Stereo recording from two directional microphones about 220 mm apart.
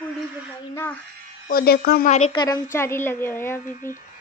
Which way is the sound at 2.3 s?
20° left (ahead or behind).